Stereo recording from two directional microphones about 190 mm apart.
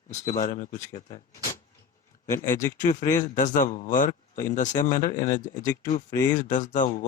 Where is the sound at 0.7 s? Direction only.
20° left (ahead or behind).